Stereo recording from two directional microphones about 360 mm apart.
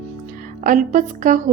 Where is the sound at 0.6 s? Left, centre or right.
Right.